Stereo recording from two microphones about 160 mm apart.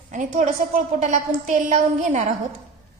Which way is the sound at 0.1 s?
50° right (ahead or behind).